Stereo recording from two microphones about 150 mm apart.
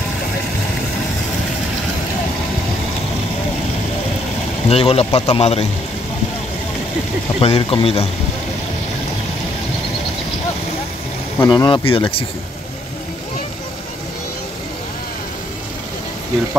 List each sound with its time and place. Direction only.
4.6 s speech: 40° left (ahead or behind)
7.3 s speech: 40° left (ahead or behind)
11.4 s speech: 30° left (ahead or behind)